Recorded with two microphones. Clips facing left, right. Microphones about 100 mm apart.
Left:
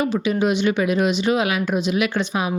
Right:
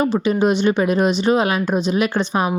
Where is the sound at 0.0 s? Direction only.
35° right (ahead or behind).